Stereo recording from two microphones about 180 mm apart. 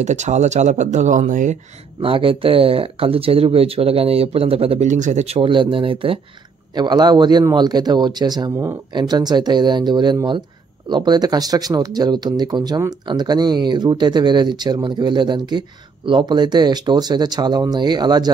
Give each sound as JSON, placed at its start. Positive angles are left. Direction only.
{"t": 0.0, "sound": "speech", "side_deg": -40}
{"t": 2.0, "sound": "speech", "side_deg": -30}